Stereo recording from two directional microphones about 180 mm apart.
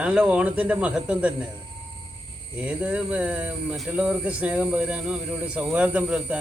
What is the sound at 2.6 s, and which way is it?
Speech, 5° right (ahead or behind).